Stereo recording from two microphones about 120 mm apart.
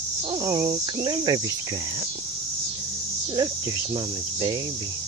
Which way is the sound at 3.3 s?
30° right (ahead or behind).